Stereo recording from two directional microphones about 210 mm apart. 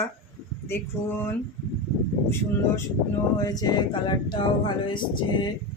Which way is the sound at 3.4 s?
20° left (ahead or behind).